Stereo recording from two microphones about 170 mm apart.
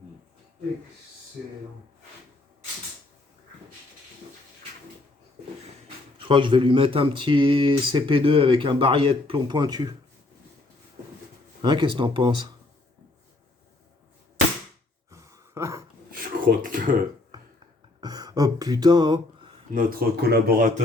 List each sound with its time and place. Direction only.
1.4 s speech: centre (ahead or behind)
6.1 s speech: 30° right (ahead or behind)
11.6 s speech: 25° right (ahead or behind)
15.1 s a sound: 15° right (ahead or behind)
16.5 s speech: 55° right (ahead or behind)
18.0 s a sound: 20° right (ahead or behind)
19.7 s speech: 60° right (ahead or behind)